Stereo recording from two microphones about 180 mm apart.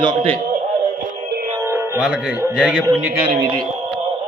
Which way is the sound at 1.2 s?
55° right (ahead or behind).